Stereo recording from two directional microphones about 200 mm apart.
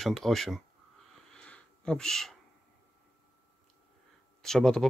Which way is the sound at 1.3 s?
5° left (ahead or behind).